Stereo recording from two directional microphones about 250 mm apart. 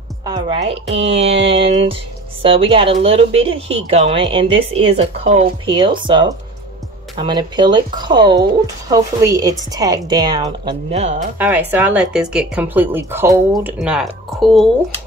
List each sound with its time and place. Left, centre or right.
0.2 s speech: centre
11.3 s speech: centre